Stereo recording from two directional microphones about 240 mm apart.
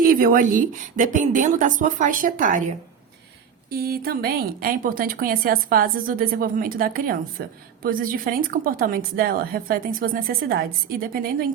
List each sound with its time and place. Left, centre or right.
0.1 s a woman's voice: right
3.7 s a woman's voice: right